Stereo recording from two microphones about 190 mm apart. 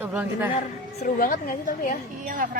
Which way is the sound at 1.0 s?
45° left (ahead or behind).